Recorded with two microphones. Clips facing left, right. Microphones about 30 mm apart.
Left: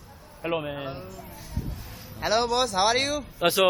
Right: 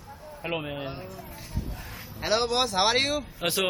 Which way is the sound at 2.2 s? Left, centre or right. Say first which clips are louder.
Left 1 dB; centre.